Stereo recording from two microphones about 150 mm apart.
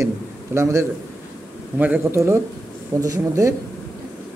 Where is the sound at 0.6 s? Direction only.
20° right (ahead or behind).